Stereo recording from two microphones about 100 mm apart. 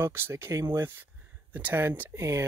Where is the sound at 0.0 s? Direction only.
20° right (ahead or behind).